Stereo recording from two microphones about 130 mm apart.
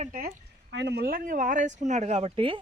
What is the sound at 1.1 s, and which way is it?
Speech, 90° right.